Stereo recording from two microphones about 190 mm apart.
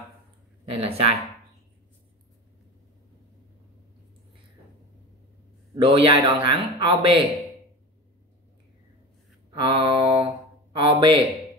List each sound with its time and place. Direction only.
0.7 s speech: 30° right (ahead or behind)
5.8 s a man's voice: 25° right (ahead or behind)
9.5 s speech: 25° right (ahead or behind)